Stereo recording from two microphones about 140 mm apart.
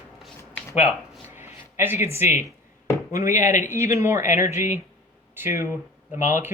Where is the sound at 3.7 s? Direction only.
20° right (ahead or behind).